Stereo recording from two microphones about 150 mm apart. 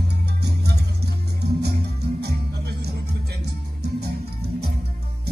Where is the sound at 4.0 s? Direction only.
90° right.